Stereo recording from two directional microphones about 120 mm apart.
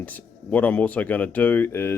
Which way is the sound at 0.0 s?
15° left (ahead or behind).